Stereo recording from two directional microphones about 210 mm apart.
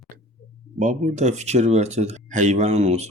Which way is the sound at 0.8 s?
35° right (ahead or behind).